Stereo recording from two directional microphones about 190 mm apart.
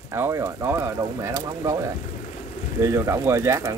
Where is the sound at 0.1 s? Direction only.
15° right (ahead or behind).